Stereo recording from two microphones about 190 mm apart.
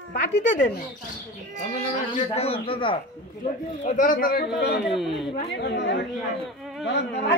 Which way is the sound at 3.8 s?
45° left (ahead or behind).